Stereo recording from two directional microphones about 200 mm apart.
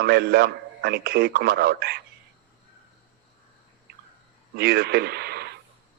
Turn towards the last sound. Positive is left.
turn(degrees=-55)  # may be behind; listen again after turning